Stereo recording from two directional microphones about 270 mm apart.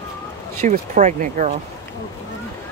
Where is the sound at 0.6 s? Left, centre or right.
Right.